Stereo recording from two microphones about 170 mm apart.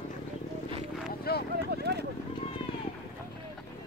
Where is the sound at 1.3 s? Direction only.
65° left (ahead or behind).